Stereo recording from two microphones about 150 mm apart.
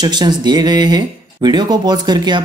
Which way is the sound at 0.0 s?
25° right (ahead or behind).